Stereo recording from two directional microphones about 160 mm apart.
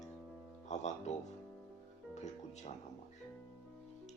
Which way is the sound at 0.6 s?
45° left (ahead or behind).